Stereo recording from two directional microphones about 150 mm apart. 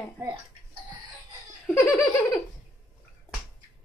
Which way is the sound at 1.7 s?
15° left (ahead or behind).